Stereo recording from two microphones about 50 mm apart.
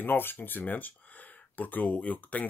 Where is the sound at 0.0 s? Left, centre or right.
Left.